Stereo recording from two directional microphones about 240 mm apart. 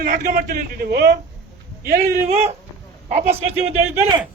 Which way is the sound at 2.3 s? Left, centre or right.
Right.